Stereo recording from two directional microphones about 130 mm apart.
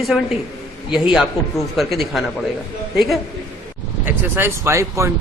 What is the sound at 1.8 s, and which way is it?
Speech, centre (ahead or behind).